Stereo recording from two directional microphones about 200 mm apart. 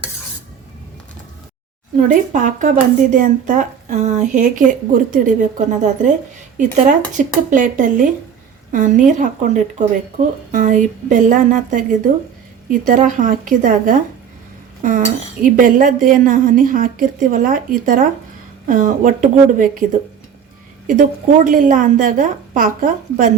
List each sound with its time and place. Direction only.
2.0 s a woman's voice: 40° right (ahead or behind)
20.8 s a woman's voice: 40° right (ahead or behind)